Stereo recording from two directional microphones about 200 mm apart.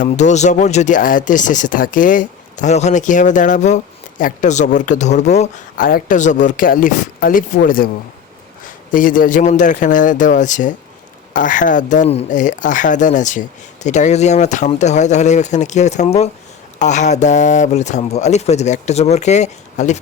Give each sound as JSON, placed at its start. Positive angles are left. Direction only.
{"t": 0.0, "sound": "speech", "side_deg": 35}
{"t": 8.9, "sound": "speech", "side_deg": 40}